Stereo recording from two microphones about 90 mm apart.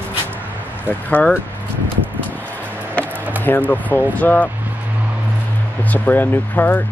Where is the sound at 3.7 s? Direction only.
20° left (ahead or behind).